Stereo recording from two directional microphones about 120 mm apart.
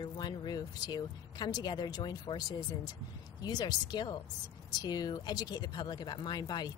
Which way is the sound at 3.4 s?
35° left (ahead or behind).